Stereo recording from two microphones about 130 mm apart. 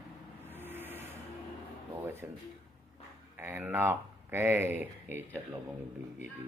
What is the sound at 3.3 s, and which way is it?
Speech, 15° right (ahead or behind).